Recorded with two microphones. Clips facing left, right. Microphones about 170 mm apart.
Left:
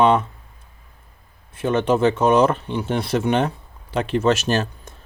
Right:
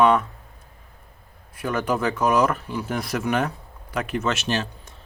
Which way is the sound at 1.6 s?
25° left (ahead or behind).